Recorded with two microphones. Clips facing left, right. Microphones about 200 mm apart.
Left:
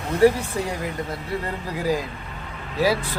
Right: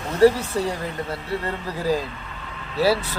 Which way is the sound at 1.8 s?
15° left (ahead or behind).